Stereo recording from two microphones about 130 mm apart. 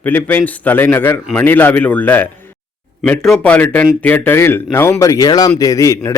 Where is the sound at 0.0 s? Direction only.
15° left (ahead or behind).